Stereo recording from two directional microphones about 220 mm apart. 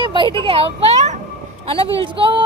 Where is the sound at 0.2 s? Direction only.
25° right (ahead or behind).